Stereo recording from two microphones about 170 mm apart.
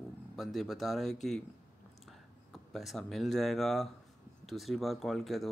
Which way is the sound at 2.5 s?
Centre (ahead or behind).